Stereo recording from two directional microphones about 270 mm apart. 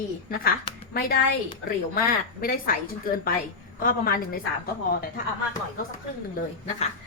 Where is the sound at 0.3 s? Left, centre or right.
Left.